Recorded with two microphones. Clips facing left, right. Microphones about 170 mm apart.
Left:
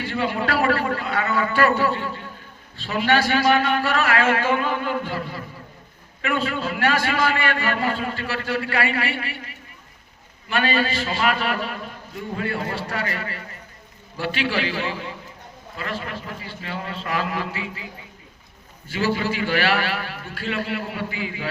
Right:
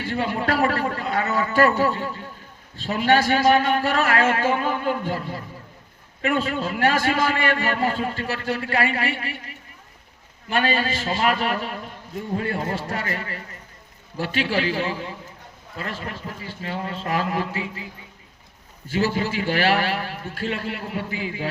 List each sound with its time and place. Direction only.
0.0 s a man's voice: 45° right (ahead or behind)
10.5 s a man's voice: 45° right (ahead or behind)
18.9 s a man's voice: 45° right (ahead or behind)